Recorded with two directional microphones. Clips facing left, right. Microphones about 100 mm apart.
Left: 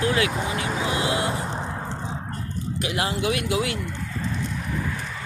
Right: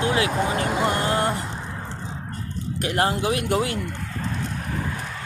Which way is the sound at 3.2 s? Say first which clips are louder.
Right 1 dB; 30° right (ahead or behind).